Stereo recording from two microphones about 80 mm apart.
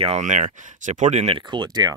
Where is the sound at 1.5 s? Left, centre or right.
Right.